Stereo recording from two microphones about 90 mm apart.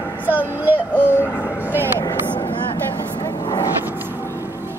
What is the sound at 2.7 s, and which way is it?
Vehicle, 50° left (ahead or behind).